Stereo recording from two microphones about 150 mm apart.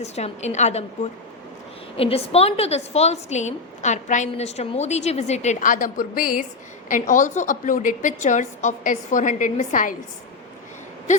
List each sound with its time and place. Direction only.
0.0 s a woman's voice: 45° left (ahead or behind)
2.0 s a woman's voice: 40° left (ahead or behind); by 9.9 s 60° left (ahead or behind)